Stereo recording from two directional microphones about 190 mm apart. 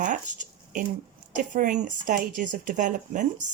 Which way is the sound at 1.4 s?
45° right (ahead or behind).